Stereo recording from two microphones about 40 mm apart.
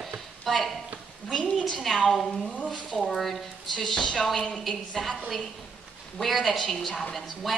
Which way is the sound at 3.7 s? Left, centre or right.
Centre.